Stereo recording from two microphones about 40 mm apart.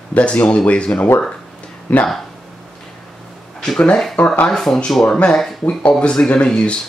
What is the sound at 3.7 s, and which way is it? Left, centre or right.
Speech, left.